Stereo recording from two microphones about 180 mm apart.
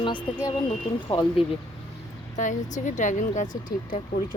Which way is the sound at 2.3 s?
45° left (ahead or behind).